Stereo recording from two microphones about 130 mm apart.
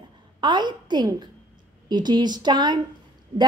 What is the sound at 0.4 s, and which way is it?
A woman's voice, 35° right (ahead or behind).